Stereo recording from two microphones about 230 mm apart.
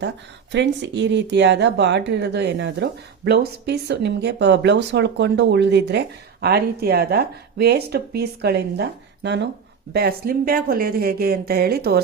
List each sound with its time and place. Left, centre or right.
0.5 s a woman's voice: right